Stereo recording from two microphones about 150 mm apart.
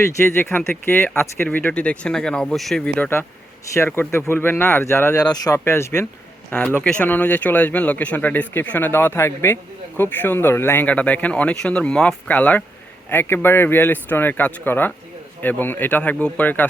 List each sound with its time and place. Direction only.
0.0 s speech: 15° left (ahead or behind)
5.3 s speech: 25° left (ahead or behind); by 16.6 s 10° left (ahead or behind)